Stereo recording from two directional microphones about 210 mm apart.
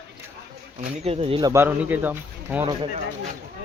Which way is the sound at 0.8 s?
30° right (ahead or behind).